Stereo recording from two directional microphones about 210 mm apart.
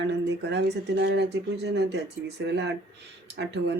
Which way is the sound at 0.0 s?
55° right (ahead or behind).